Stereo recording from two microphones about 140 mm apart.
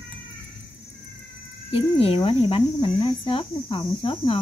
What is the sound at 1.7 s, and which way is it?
Speech, 40° left (ahead or behind).